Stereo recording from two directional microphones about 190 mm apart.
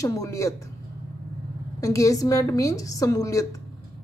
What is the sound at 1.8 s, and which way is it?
A woman's voice, 15° left (ahead or behind).